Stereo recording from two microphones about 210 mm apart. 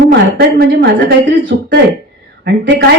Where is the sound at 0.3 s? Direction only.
55° right (ahead or behind).